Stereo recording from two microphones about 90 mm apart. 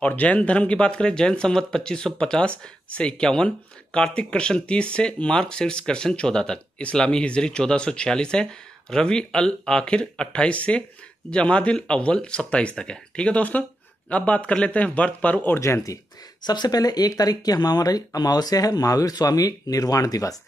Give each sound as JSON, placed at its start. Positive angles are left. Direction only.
{"t": 0.0, "sound": "speech", "side_deg": 15}
{"t": 15.6, "sound": "speech", "side_deg": 35}
{"t": 16.4, "sound": "speech", "side_deg": 50}